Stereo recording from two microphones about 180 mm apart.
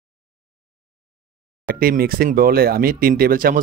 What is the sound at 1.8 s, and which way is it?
Speech, 55° right (ahead or behind).